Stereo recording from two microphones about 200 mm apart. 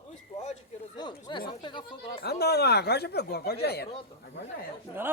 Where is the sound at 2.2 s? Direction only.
55° left (ahead or behind).